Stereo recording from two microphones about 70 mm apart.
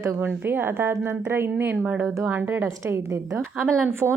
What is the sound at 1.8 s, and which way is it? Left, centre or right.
Speech, right.